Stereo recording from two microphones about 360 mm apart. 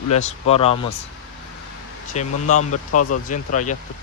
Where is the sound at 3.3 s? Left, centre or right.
Left.